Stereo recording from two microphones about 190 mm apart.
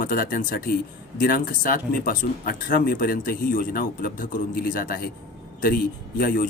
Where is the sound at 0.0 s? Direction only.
45° left (ahead or behind).